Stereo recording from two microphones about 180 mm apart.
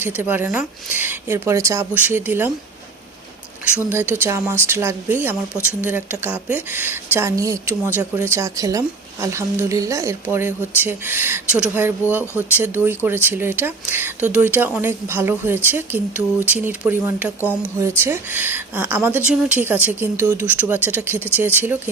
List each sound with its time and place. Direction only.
0.0 s speech: 10° right (ahead or behind)
3.8 s speech: 10° right (ahead or behind)
17.4 s speech: 10° left (ahead or behind)
17.7 s speech: 15° right (ahead or behind)